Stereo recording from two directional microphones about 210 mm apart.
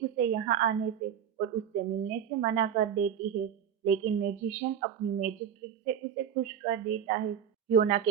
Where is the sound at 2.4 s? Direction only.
40° right (ahead or behind).